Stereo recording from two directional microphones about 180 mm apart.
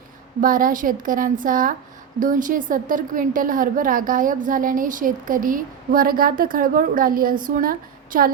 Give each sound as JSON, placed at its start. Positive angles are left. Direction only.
{"t": 0.4, "sound": "a woman's voice", "side_deg": -50}